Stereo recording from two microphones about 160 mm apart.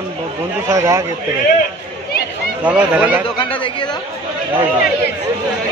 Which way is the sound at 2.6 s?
10° right (ahead or behind).